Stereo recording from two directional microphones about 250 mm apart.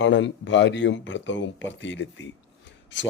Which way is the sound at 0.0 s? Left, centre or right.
Left.